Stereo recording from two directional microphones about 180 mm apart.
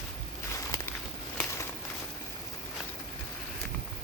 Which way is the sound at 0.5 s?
15° left (ahead or behind).